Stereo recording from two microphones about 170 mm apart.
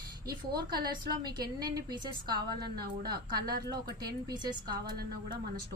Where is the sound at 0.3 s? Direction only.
25° right (ahead or behind).